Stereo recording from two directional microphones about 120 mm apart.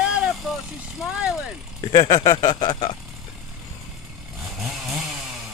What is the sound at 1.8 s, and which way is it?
Speech, 35° left (ahead or behind).